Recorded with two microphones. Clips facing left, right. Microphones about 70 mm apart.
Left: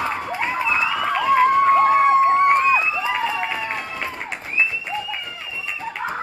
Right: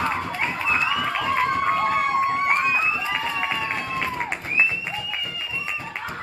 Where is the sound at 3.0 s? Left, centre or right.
Centre.